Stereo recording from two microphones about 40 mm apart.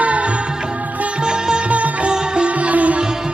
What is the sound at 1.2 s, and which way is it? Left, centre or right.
Music, right.